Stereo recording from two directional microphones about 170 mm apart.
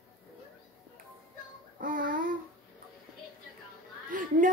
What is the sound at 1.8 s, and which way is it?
Child singing, 55° right (ahead or behind).